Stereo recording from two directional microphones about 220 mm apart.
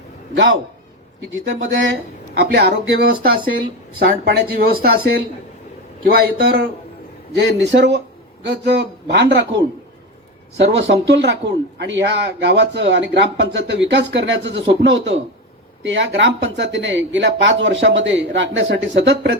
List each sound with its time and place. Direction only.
0.3 s speech: 60° right (ahead or behind)
7.3 s speech: 50° right (ahead or behind)
10.6 s speech: 55° right (ahead or behind)